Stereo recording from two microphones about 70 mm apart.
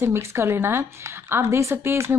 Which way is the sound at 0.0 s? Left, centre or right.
Right.